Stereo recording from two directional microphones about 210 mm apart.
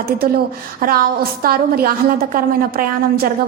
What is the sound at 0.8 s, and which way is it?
A woman's voice, 45° right (ahead or behind).